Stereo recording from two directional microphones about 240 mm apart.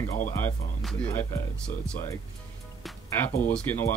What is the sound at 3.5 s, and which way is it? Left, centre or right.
Speech, centre.